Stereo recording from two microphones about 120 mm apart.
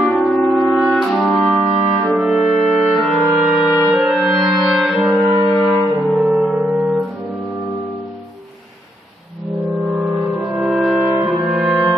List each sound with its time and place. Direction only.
0.3 s brass instrument: centre (ahead or behind)
5.6 s brass instrument: 25° left (ahead or behind)
6.1 s music: centre (ahead or behind)
9.6 s music: 5° right (ahead or behind)